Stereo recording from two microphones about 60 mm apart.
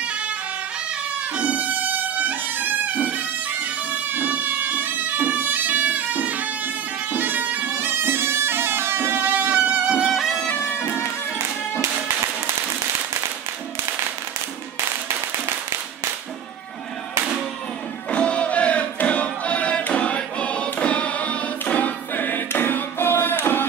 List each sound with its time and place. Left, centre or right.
1.3 s music: right
9.6 s music: centre
10.1 s music: centre
18.1 s music: left